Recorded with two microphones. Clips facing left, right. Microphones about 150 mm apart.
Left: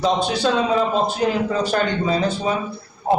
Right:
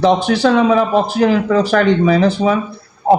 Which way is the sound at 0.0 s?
70° right (ahead or behind).